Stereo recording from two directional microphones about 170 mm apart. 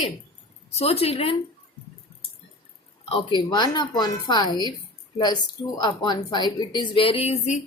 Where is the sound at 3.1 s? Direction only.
25° left (ahead or behind).